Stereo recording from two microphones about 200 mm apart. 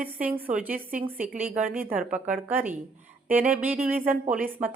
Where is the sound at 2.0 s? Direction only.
40° right (ahead or behind).